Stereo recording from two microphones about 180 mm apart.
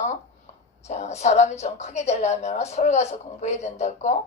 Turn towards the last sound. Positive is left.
turn(degrees=40)  # may be behind; listen again after turning